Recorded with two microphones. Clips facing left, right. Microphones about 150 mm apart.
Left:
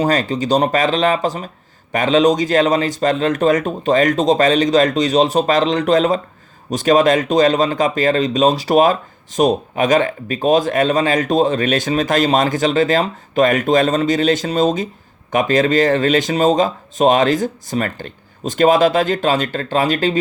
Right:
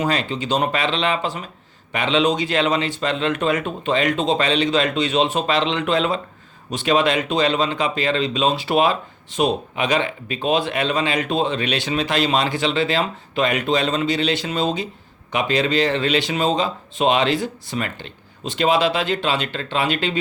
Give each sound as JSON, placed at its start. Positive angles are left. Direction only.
{"t": 0.0, "sound": "speech", "side_deg": 40}